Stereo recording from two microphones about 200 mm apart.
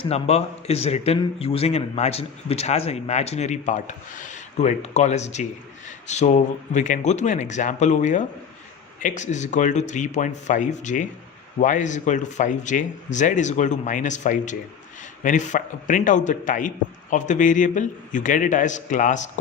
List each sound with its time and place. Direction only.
0.0 s a man's voice: 30° left (ahead or behind)